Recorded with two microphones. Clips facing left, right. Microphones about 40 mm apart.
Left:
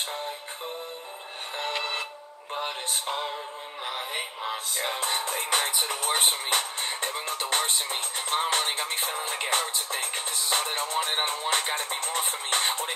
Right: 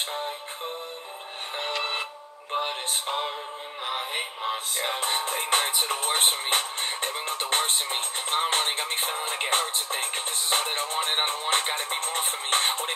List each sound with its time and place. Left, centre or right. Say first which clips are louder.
2.5 s music: right 3 dB; right